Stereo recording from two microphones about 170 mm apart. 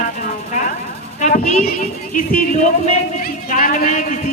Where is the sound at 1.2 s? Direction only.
50° left (ahead or behind).